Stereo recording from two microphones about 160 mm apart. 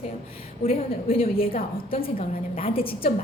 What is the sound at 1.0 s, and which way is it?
A woman's voice, 35° left (ahead or behind).